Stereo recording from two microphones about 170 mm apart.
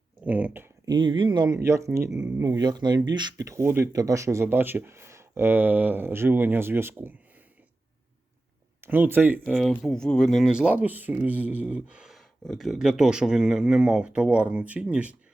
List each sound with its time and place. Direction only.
0.3 s speech: 10° right (ahead or behind)
0.9 s speech: 25° right (ahead or behind)
8.8 s speech: 10° right (ahead or behind)
9.4 s speech: centre (ahead or behind)